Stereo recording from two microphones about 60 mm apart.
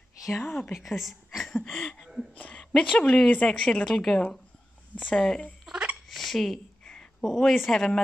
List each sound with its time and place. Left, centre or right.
0.4 s speech: centre
0.7 s a woman's voice: centre
2.0 s a sound: centre
2.3 s speech: left
3.8 s speech: centre
5.7 s a sound: centre
6.0 s hiccup: centre
6.8 s a sound: centre
7.4 s speech: centre